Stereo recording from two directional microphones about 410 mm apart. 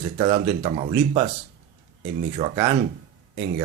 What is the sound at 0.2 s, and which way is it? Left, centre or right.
Speech, centre.